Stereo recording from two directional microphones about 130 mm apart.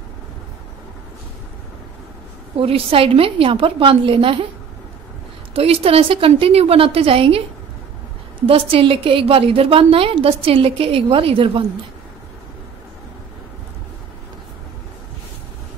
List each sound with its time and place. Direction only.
2.6 s a woman's voice: 45° right (ahead or behind)
5.5 s a woman's voice: 50° right (ahead or behind)
8.5 s a woman's voice: 45° right (ahead or behind)